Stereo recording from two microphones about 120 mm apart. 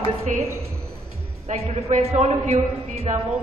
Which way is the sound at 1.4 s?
65° right (ahead or behind).